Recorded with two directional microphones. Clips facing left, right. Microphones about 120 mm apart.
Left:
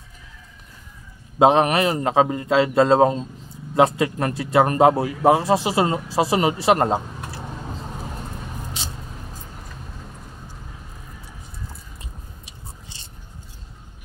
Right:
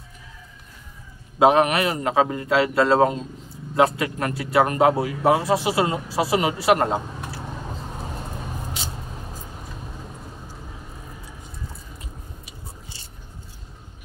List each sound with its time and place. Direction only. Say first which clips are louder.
1.4 s speech: left 1 dB; 30° left (ahead or behind)